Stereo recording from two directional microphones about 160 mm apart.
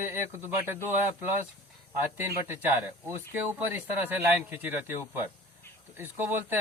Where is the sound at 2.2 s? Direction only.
15° right (ahead or behind).